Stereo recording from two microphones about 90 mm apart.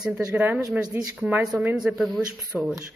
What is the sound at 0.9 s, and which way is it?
Speech, 25° right (ahead or behind).